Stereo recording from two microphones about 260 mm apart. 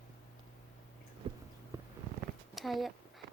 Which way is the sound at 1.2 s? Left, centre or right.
Centre.